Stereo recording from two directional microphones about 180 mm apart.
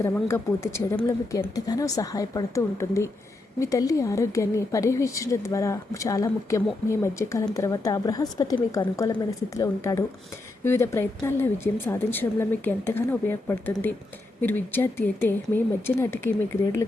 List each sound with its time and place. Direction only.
0.0 s a woman's voice: 15° left (ahead or behind)